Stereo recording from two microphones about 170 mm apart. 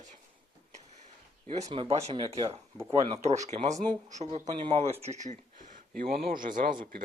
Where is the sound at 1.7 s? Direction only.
35° right (ahead or behind); by 3.3 s 20° right (ahead or behind).